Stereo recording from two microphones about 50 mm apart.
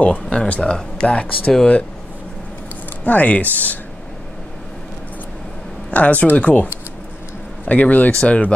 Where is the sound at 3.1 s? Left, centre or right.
Left.